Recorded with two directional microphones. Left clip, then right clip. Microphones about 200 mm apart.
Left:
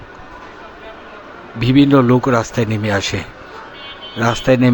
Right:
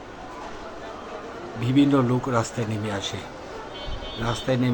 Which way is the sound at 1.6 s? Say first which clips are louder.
Left 9 dB; 25° left (ahead or behind).